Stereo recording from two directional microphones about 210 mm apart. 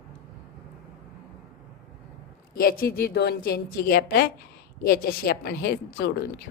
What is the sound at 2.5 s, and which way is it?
A woman's voice, 45° left (ahead or behind).